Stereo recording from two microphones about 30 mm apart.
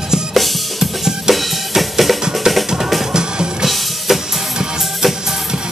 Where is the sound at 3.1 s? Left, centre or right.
Right.